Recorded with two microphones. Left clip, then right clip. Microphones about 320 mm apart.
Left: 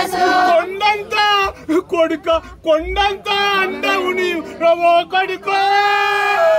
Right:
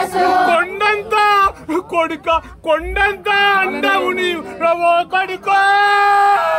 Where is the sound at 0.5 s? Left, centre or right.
Centre.